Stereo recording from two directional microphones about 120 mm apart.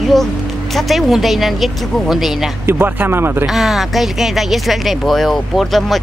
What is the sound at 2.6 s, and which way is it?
Speech, 20° right (ahead or behind).